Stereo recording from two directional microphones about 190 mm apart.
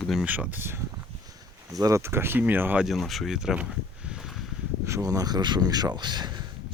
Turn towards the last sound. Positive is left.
turn(degrees=-20)  # may be behind; listen again after turning